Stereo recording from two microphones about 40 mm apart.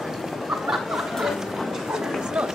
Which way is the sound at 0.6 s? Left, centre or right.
Centre.